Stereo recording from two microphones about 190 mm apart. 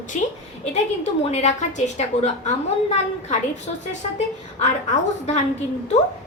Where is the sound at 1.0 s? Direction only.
35° left (ahead or behind).